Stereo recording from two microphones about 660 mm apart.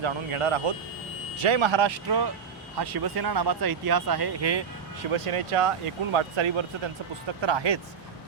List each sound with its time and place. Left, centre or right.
0.0 s speech: right
5.1 s speech: right